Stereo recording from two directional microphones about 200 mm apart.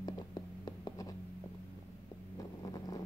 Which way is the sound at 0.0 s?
20° left (ahead or behind).